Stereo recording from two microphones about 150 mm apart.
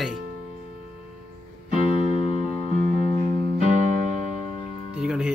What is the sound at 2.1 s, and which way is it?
Music, 40° left (ahead or behind).